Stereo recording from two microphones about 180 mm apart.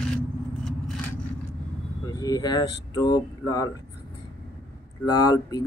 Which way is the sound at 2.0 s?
20° left (ahead or behind).